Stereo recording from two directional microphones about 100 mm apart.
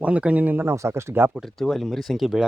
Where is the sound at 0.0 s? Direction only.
15° right (ahead or behind).